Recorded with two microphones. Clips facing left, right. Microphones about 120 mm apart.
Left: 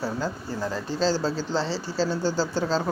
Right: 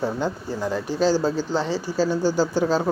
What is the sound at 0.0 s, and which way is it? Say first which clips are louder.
Speech: right 4 dB; 15° right (ahead or behind).